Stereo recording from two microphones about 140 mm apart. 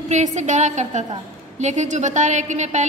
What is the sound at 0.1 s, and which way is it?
A woman's voice, 60° right (ahead or behind).